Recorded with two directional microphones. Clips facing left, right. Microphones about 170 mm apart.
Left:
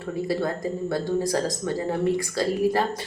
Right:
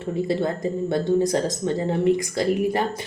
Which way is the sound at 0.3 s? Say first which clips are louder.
Right 1 dB; 20° right (ahead or behind).